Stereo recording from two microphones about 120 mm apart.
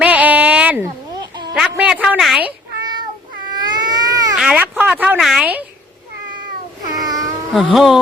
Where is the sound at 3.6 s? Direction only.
35° right (ahead or behind).